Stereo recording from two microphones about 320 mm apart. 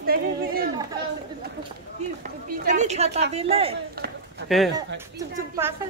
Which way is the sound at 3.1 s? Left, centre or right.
Right.